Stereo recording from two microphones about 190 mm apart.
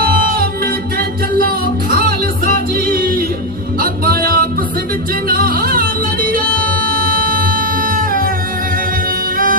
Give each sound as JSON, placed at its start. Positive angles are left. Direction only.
{"t": 0.0, "sound": "music", "side_deg": -50}